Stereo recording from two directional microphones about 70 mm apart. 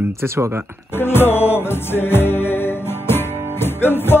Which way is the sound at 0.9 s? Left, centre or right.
Left.